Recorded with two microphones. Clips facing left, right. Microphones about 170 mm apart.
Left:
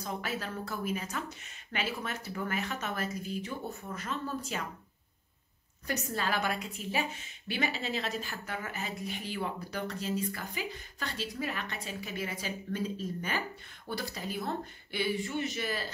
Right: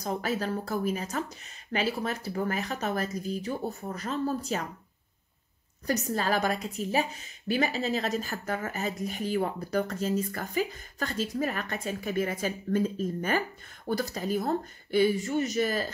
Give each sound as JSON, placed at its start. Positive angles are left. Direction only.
{"t": 0.0, "sound": "speech", "side_deg": -40}
{"t": 5.9, "sound": "a woman's voice", "side_deg": -40}